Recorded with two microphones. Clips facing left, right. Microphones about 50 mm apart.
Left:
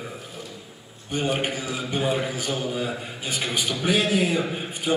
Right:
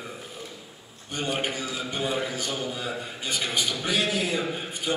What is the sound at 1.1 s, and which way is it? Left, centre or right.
A man's voice, centre.